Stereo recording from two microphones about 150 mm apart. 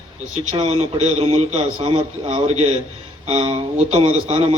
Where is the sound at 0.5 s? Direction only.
40° right (ahead or behind).